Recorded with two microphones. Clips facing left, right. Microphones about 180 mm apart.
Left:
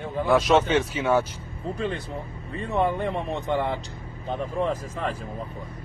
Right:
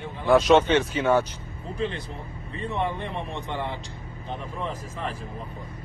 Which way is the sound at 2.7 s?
45° left (ahead or behind).